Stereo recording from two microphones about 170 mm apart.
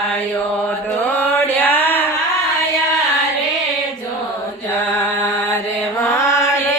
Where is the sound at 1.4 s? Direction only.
10° left (ahead or behind).